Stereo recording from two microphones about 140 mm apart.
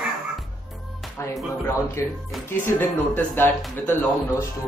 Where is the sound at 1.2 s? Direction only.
20° left (ahead or behind).